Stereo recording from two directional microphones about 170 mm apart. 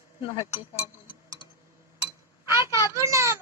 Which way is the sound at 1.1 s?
30° left (ahead or behind).